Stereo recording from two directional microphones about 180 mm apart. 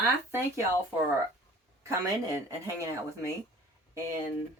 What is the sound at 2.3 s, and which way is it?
Speech, 15° right (ahead or behind).